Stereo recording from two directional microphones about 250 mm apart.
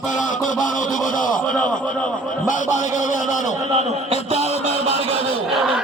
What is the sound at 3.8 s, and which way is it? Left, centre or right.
Speech, right.